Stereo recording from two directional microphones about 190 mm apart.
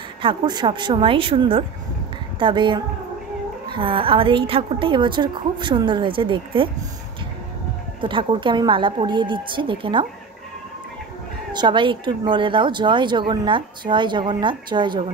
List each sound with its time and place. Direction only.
0.2 s a woman's voice: 25° right (ahead or behind)
8.0 s a woman's voice: 25° right (ahead or behind)
11.5 s a woman's voice: 25° right (ahead or behind)